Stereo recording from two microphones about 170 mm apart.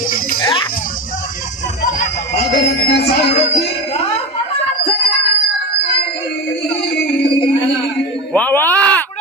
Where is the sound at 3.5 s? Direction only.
35° left (ahead or behind).